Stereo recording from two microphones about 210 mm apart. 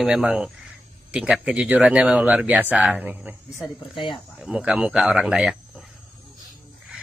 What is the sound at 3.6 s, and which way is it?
Speech, 20° left (ahead or behind).